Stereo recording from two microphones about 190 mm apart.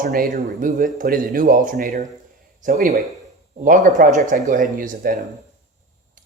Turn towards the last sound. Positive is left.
turn(degrees=-45)  # may be behind; listen again after turning